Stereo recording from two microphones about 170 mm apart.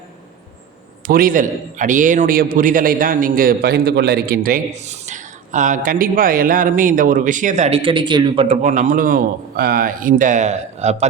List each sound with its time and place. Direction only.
1.0 s a man's voice: 55° right (ahead or behind)
4.7 s a man's voice: 45° right (ahead or behind)
8.6 s a man's voice: 45° right (ahead or behind)